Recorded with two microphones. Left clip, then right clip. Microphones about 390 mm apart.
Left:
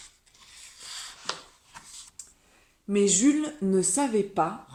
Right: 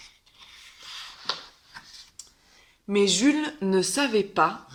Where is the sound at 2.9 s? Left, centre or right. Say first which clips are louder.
Right 2 dB; centre.